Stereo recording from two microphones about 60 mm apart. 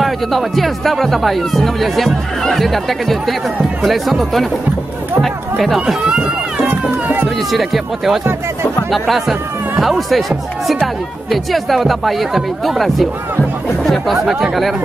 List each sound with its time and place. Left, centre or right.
0.0 s speech: centre
5.8 s speech: centre
7.2 s speech: centre
11.3 s speech: centre